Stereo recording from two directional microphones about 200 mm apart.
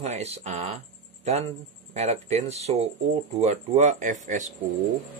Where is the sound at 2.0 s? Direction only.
35° right (ahead or behind).